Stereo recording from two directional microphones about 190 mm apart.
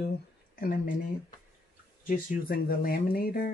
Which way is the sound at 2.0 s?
45° left (ahead or behind).